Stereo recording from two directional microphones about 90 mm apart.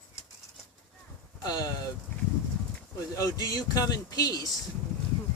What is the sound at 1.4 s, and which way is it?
Speech, 40° left (ahead or behind).